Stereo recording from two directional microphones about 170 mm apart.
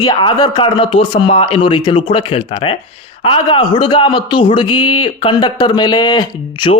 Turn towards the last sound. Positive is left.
turn(degrees=25)  # may be behind; listen again after turning